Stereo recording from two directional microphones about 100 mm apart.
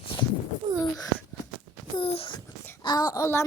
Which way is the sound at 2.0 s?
75° left (ahead or behind).